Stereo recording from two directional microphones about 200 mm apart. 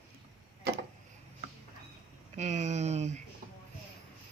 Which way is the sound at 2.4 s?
35° right (ahead or behind).